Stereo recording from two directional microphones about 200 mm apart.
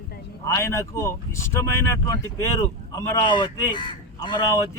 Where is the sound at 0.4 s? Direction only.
15° left (ahead or behind).